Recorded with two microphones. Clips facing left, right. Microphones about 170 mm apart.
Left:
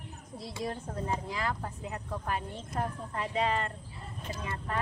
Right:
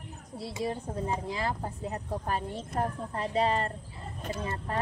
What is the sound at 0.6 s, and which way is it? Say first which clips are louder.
Speech: right 2 dB; 20° right (ahead or behind).